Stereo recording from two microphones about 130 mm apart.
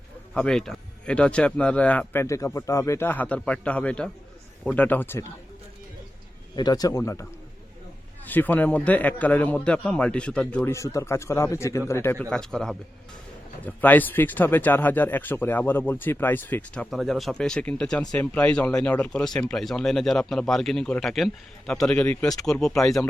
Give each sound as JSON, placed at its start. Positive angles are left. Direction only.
{"t": 0.3, "sound": "speech", "side_deg": 5}
{"t": 2.2, "sound": "speech", "side_deg": 25}
{"t": 6.6, "sound": "speech", "side_deg": 30}
{"t": 8.2, "sound": "speech", "side_deg": 15}
{"t": 10.7, "sound": "speech", "side_deg": 25}
{"t": 12.2, "sound": "a man's voice", "side_deg": 5}